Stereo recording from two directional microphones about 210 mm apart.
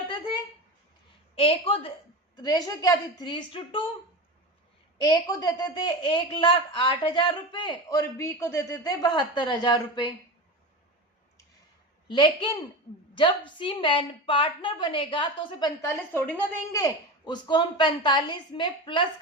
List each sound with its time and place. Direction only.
1.4 s a woman's voice: 25° left (ahead or behind)
4.9 s a woman's voice: 20° left (ahead or behind)
12.0 s a woman's voice: 20° left (ahead or behind)